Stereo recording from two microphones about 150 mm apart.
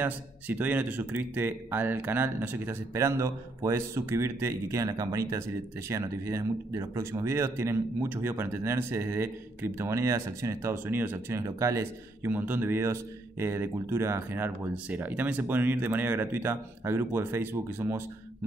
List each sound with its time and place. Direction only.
0.0 s speech: 10° right (ahead or behind)